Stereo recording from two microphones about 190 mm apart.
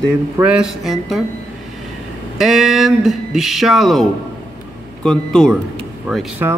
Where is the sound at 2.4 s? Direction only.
Centre (ahead or behind).